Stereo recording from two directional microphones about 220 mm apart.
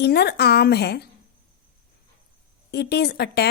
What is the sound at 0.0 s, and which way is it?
A woman's voice, 45° left (ahead or behind).